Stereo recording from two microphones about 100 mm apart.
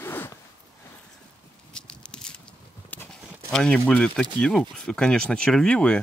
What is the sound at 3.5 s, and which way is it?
Speech, 10° left (ahead or behind).